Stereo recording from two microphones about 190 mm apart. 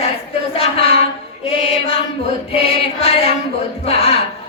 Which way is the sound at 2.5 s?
30° left (ahead or behind).